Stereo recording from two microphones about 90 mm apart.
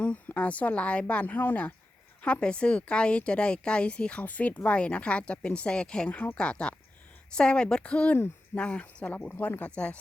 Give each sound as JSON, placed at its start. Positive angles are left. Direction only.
{"t": 0.0, "sound": "a woman's voice", "side_deg": 15}